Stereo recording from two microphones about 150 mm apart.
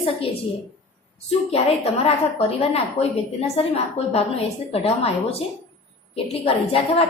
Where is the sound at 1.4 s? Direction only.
40° left (ahead or behind).